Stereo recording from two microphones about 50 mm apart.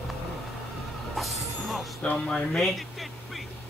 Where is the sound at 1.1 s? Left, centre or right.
Centre.